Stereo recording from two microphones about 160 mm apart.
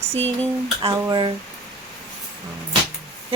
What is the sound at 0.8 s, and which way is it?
Speech, 25° right (ahead or behind).